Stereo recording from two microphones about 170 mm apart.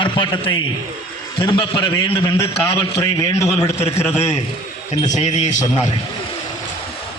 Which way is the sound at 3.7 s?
40° left (ahead or behind).